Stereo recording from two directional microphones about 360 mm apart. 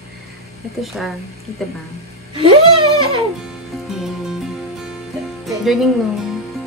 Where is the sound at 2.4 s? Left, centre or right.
Centre.